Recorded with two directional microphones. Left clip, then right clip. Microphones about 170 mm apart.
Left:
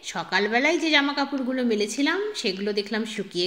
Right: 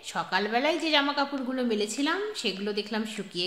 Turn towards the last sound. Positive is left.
turn(degrees=15)  # may be behind; listen again after turning